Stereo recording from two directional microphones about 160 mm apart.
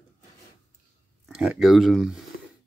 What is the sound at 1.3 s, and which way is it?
Speech, 5° right (ahead or behind).